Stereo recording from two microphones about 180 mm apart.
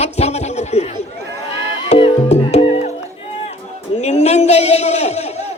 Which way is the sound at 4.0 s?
40° left (ahead or behind).